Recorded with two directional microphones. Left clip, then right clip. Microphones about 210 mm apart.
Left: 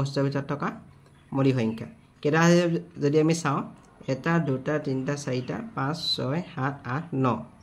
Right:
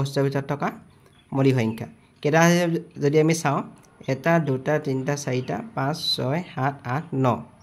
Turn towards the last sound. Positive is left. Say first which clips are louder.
# right 3 dB
turn(degrees=-30)  # may be behind; listen again after turning